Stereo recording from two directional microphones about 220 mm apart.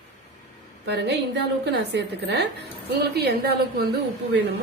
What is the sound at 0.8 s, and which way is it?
A woman's voice, 50° right (ahead or behind).